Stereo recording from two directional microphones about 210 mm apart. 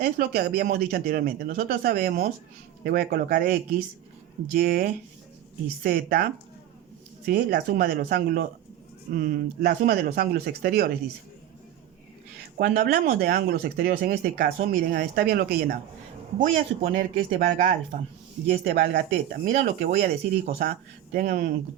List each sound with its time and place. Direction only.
0.0 s speech: 50° right (ahead or behind)
7.3 s speech: 45° right (ahead or behind)
12.5 s speech: 45° right (ahead or behind)